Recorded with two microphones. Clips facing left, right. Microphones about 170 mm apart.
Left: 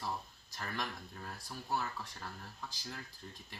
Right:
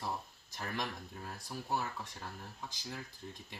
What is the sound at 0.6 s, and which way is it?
Speech, 15° right (ahead or behind).